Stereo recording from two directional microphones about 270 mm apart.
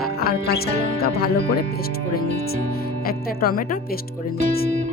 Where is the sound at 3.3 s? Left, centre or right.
Left.